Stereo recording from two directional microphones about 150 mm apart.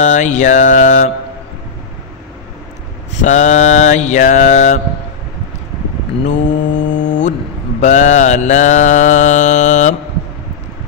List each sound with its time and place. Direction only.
0.0 s mantra: 55° left (ahead or behind)
3.1 s mantra: 50° left (ahead or behind)
6.2 s mantra: 55° left (ahead or behind)